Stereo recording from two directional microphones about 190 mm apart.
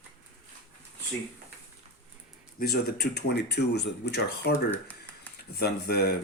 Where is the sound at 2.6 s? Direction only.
55° left (ahead or behind).